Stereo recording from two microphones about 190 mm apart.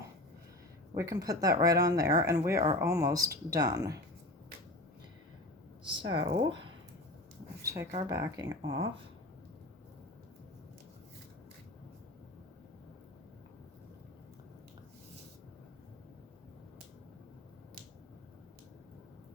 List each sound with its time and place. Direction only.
0.9 s speech: 15° right (ahead or behind)
5.8 s speech: 25° right (ahead or behind)
7.6 s speech: 15° right (ahead or behind)
8.6 s speech: 30° right (ahead or behind)